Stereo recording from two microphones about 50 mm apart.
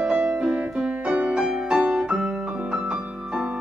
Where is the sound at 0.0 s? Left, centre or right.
Right.